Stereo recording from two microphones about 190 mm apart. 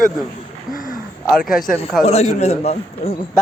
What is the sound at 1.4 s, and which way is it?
Speech, 50° left (ahead or behind).